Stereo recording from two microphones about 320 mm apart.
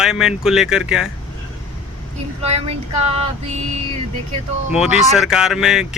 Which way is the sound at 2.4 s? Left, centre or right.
Centre.